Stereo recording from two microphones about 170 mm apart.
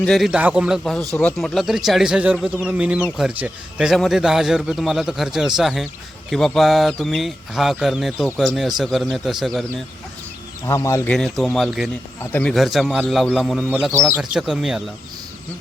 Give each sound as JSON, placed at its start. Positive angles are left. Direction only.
{"t": 0.0, "sound": "speech", "side_deg": 0}
{"t": 10.7, "sound": "speech", "side_deg": 15}
{"t": 11.1, "sound": "speech", "side_deg": 0}